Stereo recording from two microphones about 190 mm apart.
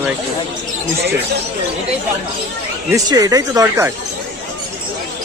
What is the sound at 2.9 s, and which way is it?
Speech, 20° right (ahead or behind).